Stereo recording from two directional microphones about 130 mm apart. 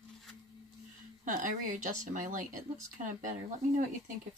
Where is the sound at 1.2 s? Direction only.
80° right.